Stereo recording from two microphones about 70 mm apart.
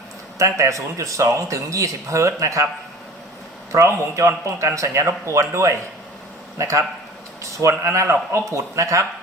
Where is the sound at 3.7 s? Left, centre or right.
Right.